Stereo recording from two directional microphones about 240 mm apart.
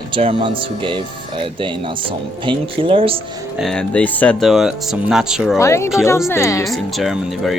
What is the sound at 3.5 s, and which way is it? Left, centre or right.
Speech, centre.